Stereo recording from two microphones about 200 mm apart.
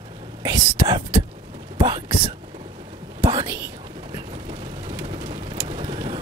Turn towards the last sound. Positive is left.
turn(degrees=-25)  # may be behind; listen again after turning